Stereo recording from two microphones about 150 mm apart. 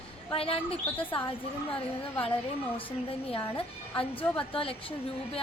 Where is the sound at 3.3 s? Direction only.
35° left (ahead or behind).